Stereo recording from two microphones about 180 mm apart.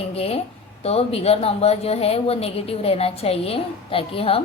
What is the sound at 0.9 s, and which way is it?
Speech, 35° left (ahead or behind).